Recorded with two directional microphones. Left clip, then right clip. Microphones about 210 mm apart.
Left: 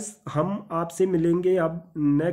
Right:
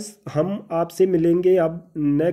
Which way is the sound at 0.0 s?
5° right (ahead or behind).